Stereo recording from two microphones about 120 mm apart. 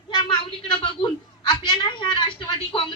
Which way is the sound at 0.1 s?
40° left (ahead or behind).